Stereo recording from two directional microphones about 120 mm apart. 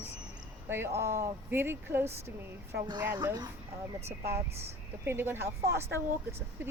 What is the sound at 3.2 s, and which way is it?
Speech, 35° right (ahead or behind).